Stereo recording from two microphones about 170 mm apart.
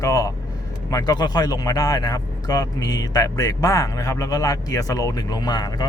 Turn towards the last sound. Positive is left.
turn(degrees=25)  # may be behind; listen again after turning